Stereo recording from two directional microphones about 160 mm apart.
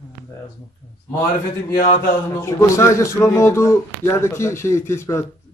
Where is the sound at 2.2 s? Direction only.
20° left (ahead or behind).